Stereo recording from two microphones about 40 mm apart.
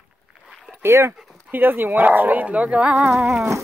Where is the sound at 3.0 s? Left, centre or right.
Centre.